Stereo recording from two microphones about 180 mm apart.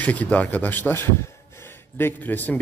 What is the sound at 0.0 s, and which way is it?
A man's voice, 10° left (ahead or behind).